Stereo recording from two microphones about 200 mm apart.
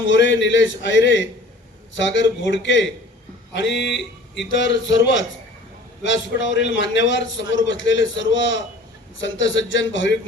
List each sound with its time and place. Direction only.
0.1 s a man's voice: 65° left (ahead or behind)